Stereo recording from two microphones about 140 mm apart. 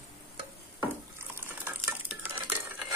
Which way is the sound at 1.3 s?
15° right (ahead or behind).